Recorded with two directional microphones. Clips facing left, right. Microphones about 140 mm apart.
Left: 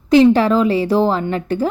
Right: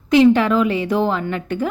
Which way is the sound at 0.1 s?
35° left (ahead or behind).